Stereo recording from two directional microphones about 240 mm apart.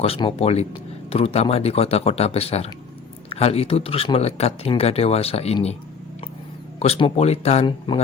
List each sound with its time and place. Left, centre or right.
0.0 s speech: left
6.7 s speech: left